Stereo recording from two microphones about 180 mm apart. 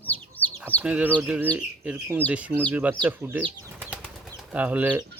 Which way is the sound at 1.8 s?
10° right (ahead or behind).